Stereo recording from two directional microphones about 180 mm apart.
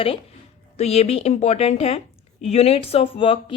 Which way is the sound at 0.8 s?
35° left (ahead or behind).